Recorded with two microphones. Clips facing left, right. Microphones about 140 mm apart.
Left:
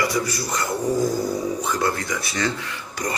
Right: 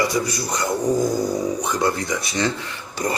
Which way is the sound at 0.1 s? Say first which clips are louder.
Right 1 dB; 20° right (ahead or behind).